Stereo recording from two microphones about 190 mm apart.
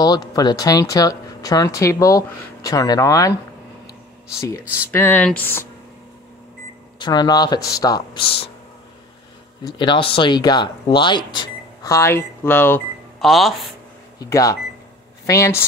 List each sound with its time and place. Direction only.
0.0 s speech: 20° left (ahead or behind)
4.4 s speech: 15° left (ahead or behind)
7.0 s speech: 20° left (ahead or behind)
9.7 s speech: 25° left (ahead or behind)
13.2 s speech: centre (ahead or behind)
14.2 s speech: 15° left (ahead or behind)